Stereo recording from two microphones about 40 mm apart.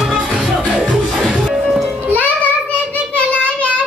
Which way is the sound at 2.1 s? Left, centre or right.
Left.